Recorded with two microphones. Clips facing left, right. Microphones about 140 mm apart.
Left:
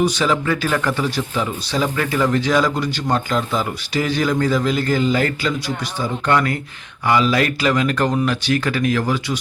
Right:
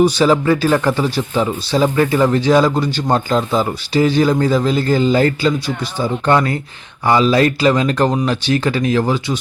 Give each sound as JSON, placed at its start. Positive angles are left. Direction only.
{"t": 0.0, "sound": "speech", "side_deg": -35}